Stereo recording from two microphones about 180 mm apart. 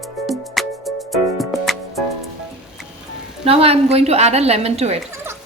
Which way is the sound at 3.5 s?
35° right (ahead or behind).